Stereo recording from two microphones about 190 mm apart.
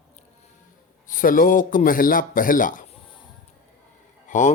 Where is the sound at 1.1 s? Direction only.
45° left (ahead or behind).